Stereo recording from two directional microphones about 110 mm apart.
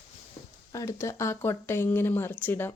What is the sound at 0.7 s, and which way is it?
Speech, 25° left (ahead or behind).